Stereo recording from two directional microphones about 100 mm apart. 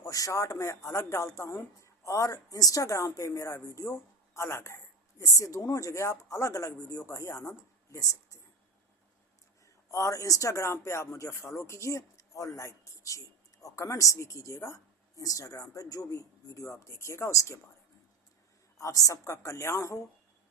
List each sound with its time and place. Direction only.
0.0 s speech: 35° left (ahead or behind)
9.6 s speech: 30° left (ahead or behind)
18.8 s speech: 35° left (ahead or behind)